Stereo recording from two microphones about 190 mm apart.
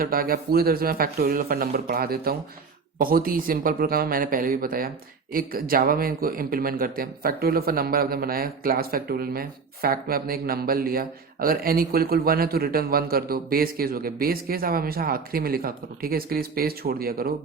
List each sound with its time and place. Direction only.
0.0 s speech: 50° right (ahead or behind)